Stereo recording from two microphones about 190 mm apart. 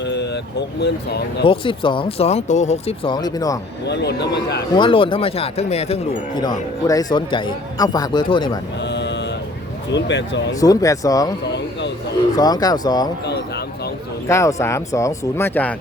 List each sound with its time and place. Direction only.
0.0 s speech: 65° left (ahead or behind)
1.5 s a man's voice: 25° left (ahead or behind)
3.8 s a man's voice: 60° left (ahead or behind)
4.7 s a man's voice: 25° left (ahead or behind)
6.3 s a man's voice: 20° left (ahead or behind)
8.9 s a sound: 65° left (ahead or behind)
9.9 s speech: 65° left (ahead or behind)
10.6 s a man's voice: 20° left (ahead or behind)
12.4 s a man's voice: 20° left (ahead or behind)
14.3 s speech: 15° left (ahead or behind)